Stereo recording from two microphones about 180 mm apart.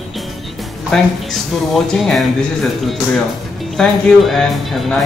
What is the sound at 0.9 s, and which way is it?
Speech, centre (ahead or behind).